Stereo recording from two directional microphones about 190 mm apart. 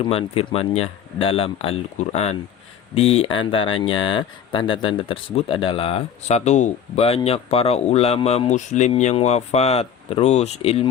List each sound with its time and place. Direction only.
0.0 s speech: 30° left (ahead or behind)